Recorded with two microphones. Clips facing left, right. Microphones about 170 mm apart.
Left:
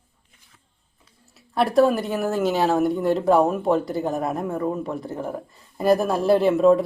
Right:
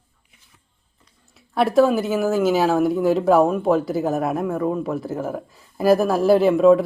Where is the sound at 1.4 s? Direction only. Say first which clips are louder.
Right 2 dB; centre (ahead or behind).